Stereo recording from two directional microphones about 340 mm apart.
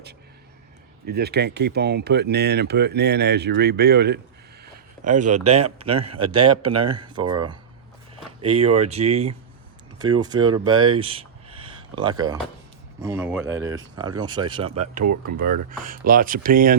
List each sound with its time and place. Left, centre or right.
1.0 s speech: right
4.6 s a sound: right
5.5 s speech: centre
6.3 s speech: right
6.7 s speech: centre
15.0 s speech: right
15.8 s speech: right